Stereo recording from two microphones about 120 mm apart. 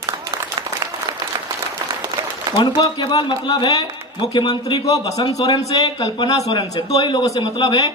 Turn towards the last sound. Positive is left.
turn(degrees=35)  # may be behind; listen again after turning